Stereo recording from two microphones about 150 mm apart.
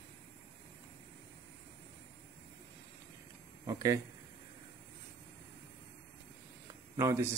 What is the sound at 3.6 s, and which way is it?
Speech, 25° right (ahead or behind).